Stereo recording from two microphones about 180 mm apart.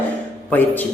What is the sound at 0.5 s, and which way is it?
Speech, 10° left (ahead or behind).